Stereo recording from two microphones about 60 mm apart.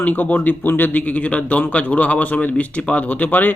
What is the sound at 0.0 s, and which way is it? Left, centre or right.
Speech, left.